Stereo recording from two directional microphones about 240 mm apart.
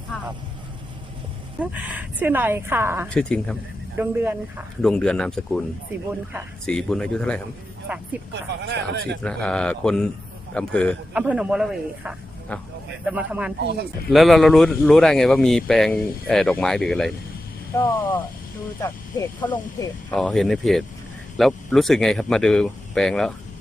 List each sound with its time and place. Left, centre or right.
1.5 s a woman's voice: centre
3.1 s speech: centre
3.9 s a woman's voice: centre
4.8 s speech: centre
6.7 s speech: centre
8.3 s speech: right
9.2 s speech: centre